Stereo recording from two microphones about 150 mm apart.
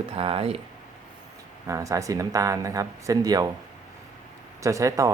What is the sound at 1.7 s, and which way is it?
Speech, 20° right (ahead or behind).